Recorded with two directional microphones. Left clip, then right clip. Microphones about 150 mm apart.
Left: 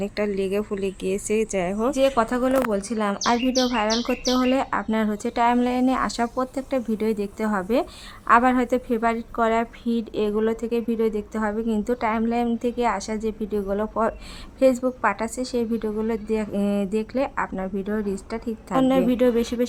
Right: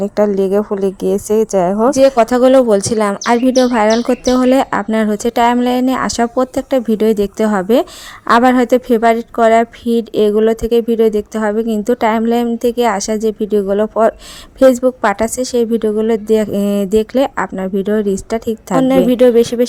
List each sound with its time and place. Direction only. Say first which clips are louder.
0.3 s speech: right 11 dB; 30° right (ahead or behind)